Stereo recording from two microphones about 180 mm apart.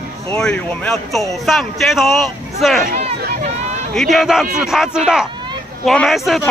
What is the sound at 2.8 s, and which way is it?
Speech, 40° right (ahead or behind).